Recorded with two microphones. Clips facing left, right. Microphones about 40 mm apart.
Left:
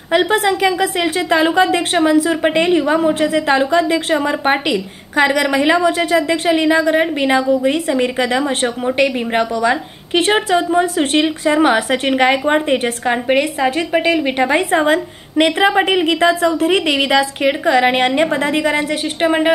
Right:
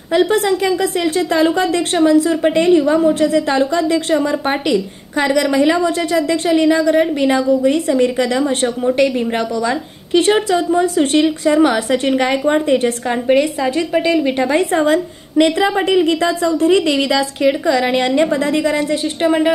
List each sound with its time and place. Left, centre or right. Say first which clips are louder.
0.1 s a woman's voice: even; left
8.9 s a woman's voice: even; left